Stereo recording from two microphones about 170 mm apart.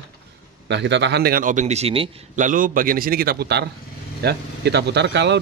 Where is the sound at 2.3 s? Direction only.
50° right (ahead or behind).